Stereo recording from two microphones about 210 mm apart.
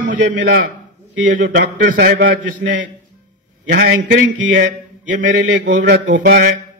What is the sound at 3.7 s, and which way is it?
A man's voice, 45° right (ahead or behind).